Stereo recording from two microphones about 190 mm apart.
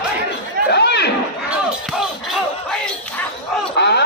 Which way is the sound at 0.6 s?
60° left (ahead or behind).